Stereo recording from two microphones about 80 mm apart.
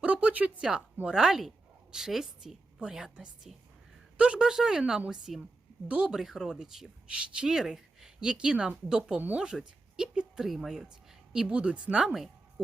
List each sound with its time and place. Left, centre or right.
0.0 s a sound: centre
1.0 s a woman's voice: centre
9.2 s speech: centre
9.5 s speech: centre